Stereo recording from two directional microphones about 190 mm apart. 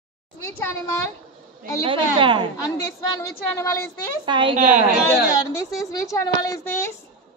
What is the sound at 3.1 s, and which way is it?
Speech, 15° left (ahead or behind).